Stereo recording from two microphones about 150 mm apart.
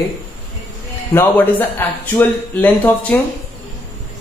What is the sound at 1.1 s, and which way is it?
Speech, 10° left (ahead or behind).